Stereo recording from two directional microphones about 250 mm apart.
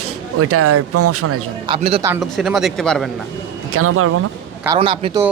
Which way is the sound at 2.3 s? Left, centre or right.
Centre.